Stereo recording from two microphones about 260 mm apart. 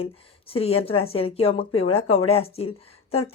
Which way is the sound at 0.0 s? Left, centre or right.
Left.